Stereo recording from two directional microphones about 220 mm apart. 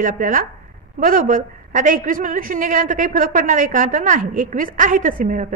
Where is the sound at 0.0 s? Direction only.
35° right (ahead or behind).